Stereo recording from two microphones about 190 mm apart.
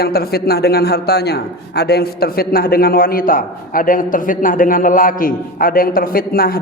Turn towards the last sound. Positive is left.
turn(degrees=50)  # may be behind; listen again after turning